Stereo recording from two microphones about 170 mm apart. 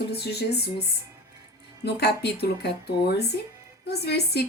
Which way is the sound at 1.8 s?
70° left (ahead or behind).